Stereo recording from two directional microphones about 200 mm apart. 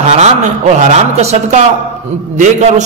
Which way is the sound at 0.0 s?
35° right (ahead or behind).